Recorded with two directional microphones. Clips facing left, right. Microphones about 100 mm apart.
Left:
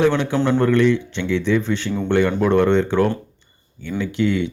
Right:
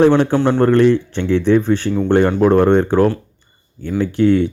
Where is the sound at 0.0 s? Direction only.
45° right (ahead or behind).